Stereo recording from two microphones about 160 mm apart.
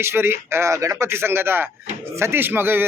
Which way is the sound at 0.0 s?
15° right (ahead or behind).